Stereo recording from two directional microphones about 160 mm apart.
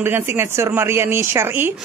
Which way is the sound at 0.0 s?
15° right (ahead or behind).